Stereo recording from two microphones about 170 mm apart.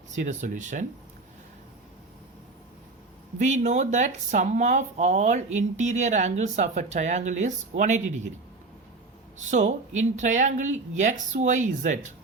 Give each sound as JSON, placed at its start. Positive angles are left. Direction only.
{"t": 0.1, "sound": "speech", "side_deg": -45}
{"t": 3.3, "sound": "speech", "side_deg": -45}
{"t": 9.4, "sound": "speech", "side_deg": -45}